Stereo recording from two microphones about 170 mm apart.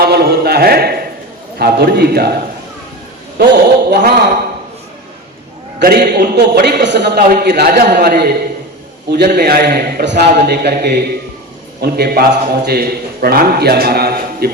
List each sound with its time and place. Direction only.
0.0 s a man's voice: 70° right (ahead or behind)
3.3 s a man's voice: 70° right (ahead or behind)
5.8 s a man's voice: 65° right (ahead or behind)
6.3 s a man's voice: 85° right
7.4 s a man's voice: 70° right (ahead or behind)
9.0 s a man's voice: 80° right
10.3 s a man's voice: 70° right (ahead or behind)